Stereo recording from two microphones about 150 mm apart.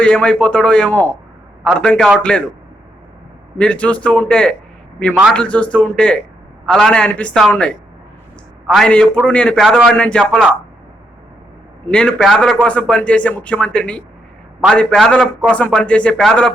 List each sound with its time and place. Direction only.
0.0 s speech: 5° left (ahead or behind)
3.6 s a man's voice: 10° left (ahead or behind)
8.6 s speech: 5° left (ahead or behind)
11.9 s a man's voice: 10° left (ahead or behind)